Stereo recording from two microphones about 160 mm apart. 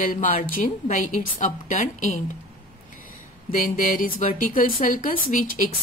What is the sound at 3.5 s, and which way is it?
Speech, 55° left (ahead or behind).